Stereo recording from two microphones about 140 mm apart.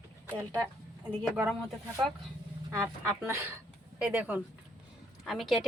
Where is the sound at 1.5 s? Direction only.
Centre (ahead or behind).